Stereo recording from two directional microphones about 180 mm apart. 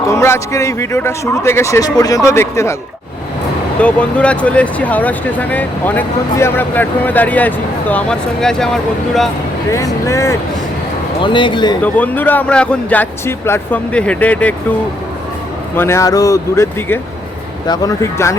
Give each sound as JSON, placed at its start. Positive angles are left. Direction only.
{"t": 0.0, "sound": "speech", "side_deg": 15}
{"t": 3.8, "sound": "speech", "side_deg": 5}
{"t": 9.7, "sound": "speech", "side_deg": 15}
{"t": 11.2, "sound": "speech", "side_deg": 25}
{"t": 11.8, "sound": "speech", "side_deg": 10}
{"t": 15.7, "sound": "speech", "side_deg": 15}